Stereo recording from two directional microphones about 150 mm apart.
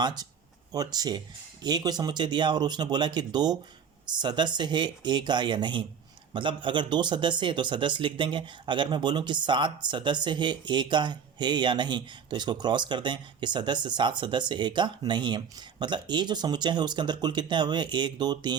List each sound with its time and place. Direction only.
0.0 s speech: 25° right (ahead or behind)